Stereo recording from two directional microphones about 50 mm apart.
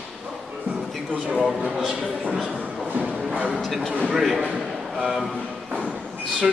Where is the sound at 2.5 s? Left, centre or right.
Right.